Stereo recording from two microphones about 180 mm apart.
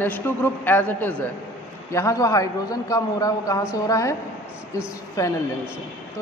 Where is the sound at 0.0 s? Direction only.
10° left (ahead or behind).